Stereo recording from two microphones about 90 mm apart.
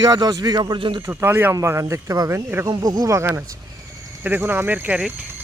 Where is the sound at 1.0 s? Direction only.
30° right (ahead or behind).